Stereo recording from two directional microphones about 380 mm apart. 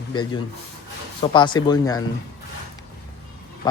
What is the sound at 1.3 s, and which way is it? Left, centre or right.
Speech, centre.